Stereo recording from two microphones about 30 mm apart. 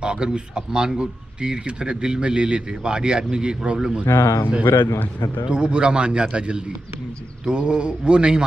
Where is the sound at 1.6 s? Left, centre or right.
Right; by 4.0 s centre.